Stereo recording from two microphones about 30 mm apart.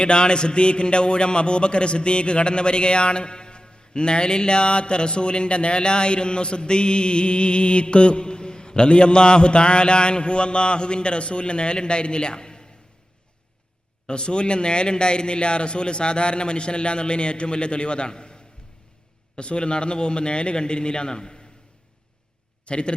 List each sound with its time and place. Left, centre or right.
0.0 s a man's voice: left
14.1 s a man's voice: left
22.6 s speech: left